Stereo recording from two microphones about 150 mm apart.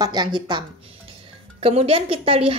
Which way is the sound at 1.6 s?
40° right (ahead or behind).